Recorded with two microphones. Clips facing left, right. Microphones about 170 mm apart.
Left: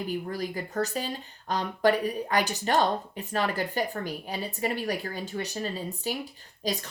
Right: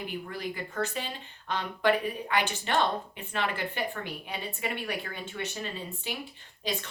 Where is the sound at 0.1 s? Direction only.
40° left (ahead or behind).